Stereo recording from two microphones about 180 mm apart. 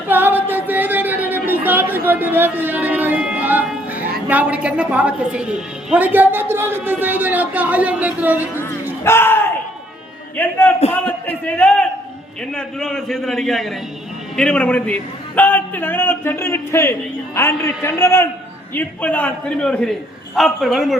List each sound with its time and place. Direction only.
0.1 s speech: 10° right (ahead or behind)
8.6 s a sound: 15° left (ahead or behind)
10.3 s a man's voice: 10° left (ahead or behind)